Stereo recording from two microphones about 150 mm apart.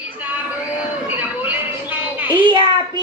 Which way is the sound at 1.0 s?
10° right (ahead or behind).